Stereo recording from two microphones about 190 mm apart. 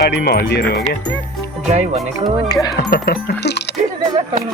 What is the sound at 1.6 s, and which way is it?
Speech, 35° right (ahead or behind).